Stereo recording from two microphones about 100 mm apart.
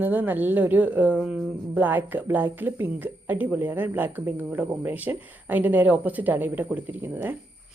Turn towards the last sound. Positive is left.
turn(degrees=-15)  # may be behind; listen again after turning